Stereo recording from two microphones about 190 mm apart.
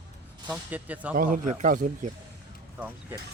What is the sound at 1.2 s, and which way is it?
Speech, 45° right (ahead or behind).